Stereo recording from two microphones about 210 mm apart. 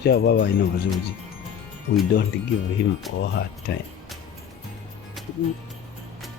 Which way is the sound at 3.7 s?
55° left (ahead or behind).